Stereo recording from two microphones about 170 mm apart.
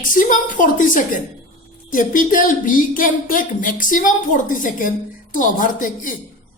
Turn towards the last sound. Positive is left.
turn(degrees=50)  # may be behind; listen again after turning